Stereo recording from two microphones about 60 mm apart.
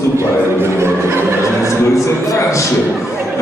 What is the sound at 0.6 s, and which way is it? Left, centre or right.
Speech, right.